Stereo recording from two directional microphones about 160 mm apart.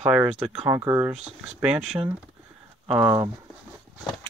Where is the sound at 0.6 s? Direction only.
20° right (ahead or behind).